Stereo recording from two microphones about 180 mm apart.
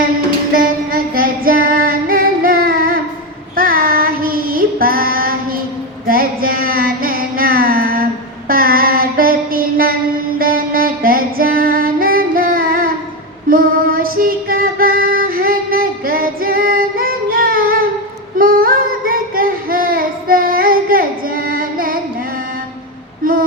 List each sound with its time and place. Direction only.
0.5 s music: 50° right (ahead or behind)
3.5 s child singing: 55° right (ahead or behind)
6.1 s music: 55° right (ahead or behind)
8.4 s mantra: 55° right (ahead or behind)
13.5 s female singing: 55° right (ahead or behind)
18.3 s child singing: 50° right (ahead or behind)
23.2 s a sound: 50° right (ahead or behind)